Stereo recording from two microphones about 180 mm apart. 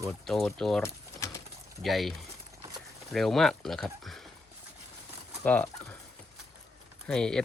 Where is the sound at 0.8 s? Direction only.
15° left (ahead or behind).